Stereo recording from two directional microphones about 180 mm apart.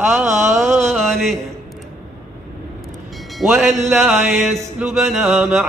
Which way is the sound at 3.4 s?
5° right (ahead or behind).